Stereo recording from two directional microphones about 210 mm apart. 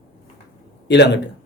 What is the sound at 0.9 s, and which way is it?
Speech, 55° left (ahead or behind).